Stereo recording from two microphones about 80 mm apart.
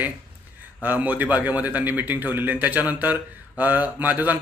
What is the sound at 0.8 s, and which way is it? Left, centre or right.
A man's voice, right.